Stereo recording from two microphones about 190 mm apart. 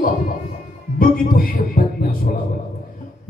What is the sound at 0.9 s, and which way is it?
A man's voice, 50° left (ahead or behind).